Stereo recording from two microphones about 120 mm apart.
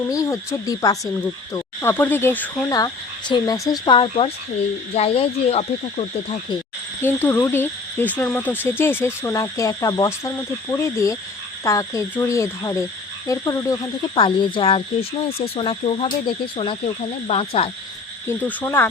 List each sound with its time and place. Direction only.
0.1 s speech: 30° left (ahead or behind)
2.6 s speech: 30° left (ahead or behind)
3.9 s speech: 50° left (ahead or behind)
7.0 s speech: 15° left (ahead or behind)
14.2 s speech: 45° left (ahead or behind)
18.3 s speech: 15° left (ahead or behind)